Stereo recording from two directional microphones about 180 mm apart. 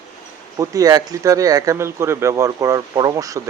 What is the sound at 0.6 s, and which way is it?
Speech, 20° right (ahead or behind).